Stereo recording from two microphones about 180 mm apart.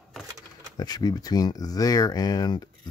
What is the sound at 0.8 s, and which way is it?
Speech, 20° left (ahead or behind).